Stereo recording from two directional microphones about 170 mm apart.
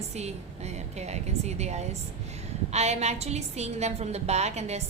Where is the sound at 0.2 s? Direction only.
40° right (ahead or behind).